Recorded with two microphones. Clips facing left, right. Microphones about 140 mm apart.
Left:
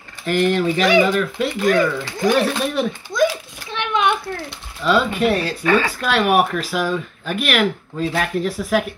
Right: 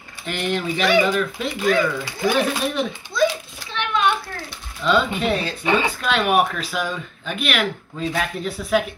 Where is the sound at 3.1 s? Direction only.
15° left (ahead or behind).